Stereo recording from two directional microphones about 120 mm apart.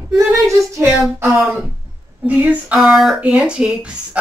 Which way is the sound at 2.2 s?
15° right (ahead or behind).